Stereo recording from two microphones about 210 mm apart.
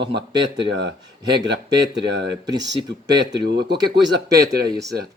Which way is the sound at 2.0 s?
55° right (ahead or behind).